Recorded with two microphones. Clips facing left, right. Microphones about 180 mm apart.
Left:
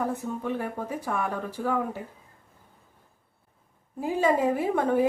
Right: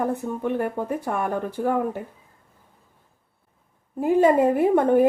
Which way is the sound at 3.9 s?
55° right (ahead or behind).